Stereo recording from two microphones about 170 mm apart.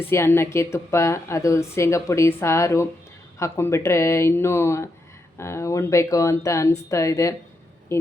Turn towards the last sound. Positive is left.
turn(degrees=20)  # may be behind; listen again after turning